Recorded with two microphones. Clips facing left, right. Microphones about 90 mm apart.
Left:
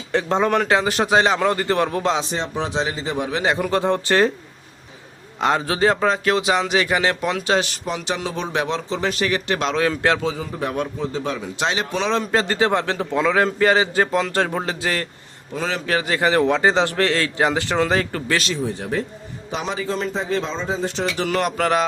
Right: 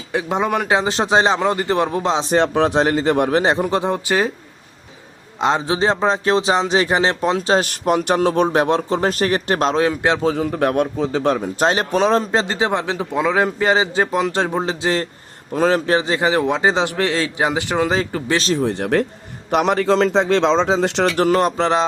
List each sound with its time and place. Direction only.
0.1 s a man's voice: 10° right (ahead or behind)
2.3 s a man's voice: 60° right (ahead or behind)
3.3 s a man's voice: 30° right (ahead or behind); by 4.3 s 10° right (ahead or behind)
5.4 s a man's voice: 20° right (ahead or behind)
7.7 s a man's voice: 55° right (ahead or behind)
9.8 s a man's voice: 20° right (ahead or behind)
10.2 s a man's voice: 60° right (ahead or behind)
11.3 s speech: 45° right (ahead or behind)
12.2 s a man's voice: 25° right (ahead or behind)
15.5 s speech: 45° right (ahead or behind)
15.9 s speech: 25° right (ahead or behind)
18.5 s a man's voice: 65° right (ahead or behind)
21.2 s a man's voice: 35° right (ahead or behind)
21.6 s a man's voice: 25° right (ahead or behind)